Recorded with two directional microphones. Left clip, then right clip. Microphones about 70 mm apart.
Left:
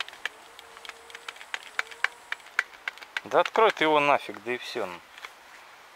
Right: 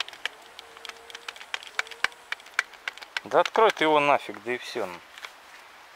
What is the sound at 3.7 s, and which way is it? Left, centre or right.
Speech, centre.